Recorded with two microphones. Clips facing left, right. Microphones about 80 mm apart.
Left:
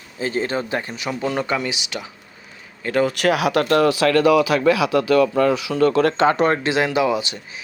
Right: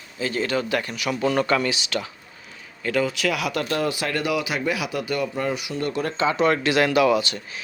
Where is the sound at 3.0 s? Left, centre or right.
Left.